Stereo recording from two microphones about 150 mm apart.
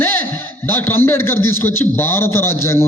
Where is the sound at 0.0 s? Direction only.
15° left (ahead or behind).